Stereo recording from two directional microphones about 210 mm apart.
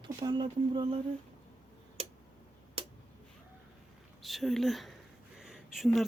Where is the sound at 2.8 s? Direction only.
30° right (ahead or behind).